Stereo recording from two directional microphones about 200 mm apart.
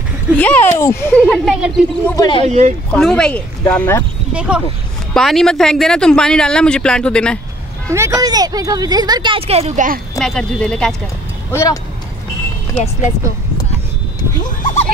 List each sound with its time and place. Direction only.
0.4 s a child's voice: 10° left (ahead or behind)
2.1 s speech: 20° left (ahead or behind)
2.4 s speech: 35° right (ahead or behind)
2.9 s speech: 5° left (ahead or behind)
4.3 s speech: 5° right (ahead or behind)
7.9 s speech: 15° right (ahead or behind); by 9.9 s 35° right (ahead or behind)
10.1 s speech: centre (ahead or behind)
11.5 s a child's voice: 15° left (ahead or behind)
12.7 s speech: 30° left (ahead or behind)
14.4 s speech: 40° left (ahead or behind)